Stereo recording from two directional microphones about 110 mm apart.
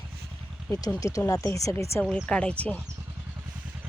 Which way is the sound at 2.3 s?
10° left (ahead or behind).